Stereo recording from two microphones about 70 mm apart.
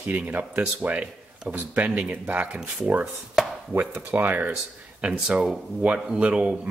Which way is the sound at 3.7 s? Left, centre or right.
Right.